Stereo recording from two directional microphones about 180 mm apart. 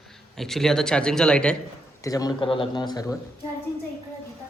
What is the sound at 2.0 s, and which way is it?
Speech, 20° left (ahead or behind).